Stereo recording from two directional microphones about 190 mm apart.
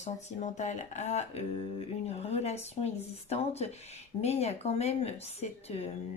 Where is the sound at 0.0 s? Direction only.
35° left (ahead or behind).